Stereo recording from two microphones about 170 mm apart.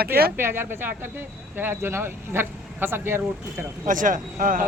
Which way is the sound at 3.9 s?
50° right (ahead or behind).